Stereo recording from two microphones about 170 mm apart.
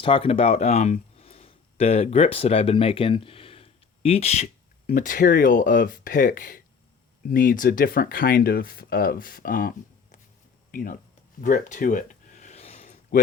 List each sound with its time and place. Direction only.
0.0 s speech: 30° left (ahead or behind)
4.9 s speech: 55° left (ahead or behind)
11.3 s a sound: 50° left (ahead or behind)